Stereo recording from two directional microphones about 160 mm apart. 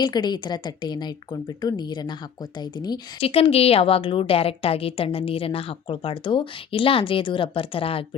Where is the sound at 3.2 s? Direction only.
40° left (ahead or behind).